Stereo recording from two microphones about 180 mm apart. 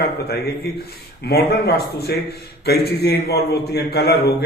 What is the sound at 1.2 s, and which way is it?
A man's voice, 60° left (ahead or behind).